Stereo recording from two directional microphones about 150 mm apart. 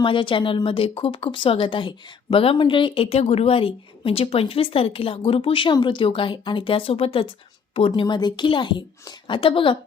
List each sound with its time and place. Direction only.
0.0 s speech: 35° left (ahead or behind)